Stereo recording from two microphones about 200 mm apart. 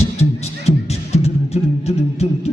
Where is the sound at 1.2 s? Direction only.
30° left (ahead or behind).